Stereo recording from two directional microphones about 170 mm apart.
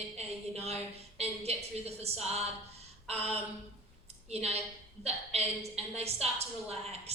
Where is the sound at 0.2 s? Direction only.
40° right (ahead or behind).